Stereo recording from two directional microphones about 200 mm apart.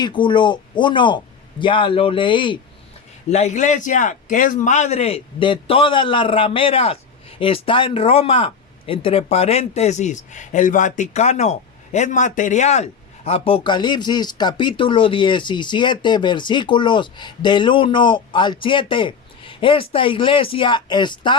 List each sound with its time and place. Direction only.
0.0 s a man's voice: 25° left (ahead or behind)
3.2 s a man's voice: 35° left (ahead or behind)